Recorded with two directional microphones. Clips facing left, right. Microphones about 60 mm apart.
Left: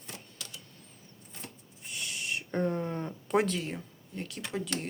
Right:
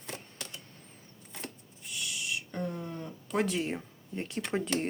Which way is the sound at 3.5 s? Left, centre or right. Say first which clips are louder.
Right 3 dB; right.